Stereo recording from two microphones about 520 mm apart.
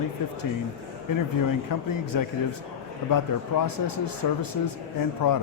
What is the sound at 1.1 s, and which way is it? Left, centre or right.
Speech, left.